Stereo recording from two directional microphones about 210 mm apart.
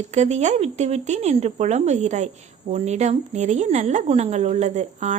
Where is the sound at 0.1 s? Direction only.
30° right (ahead or behind).